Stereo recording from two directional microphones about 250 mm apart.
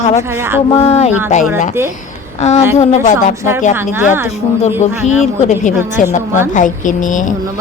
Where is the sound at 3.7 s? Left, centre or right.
Centre.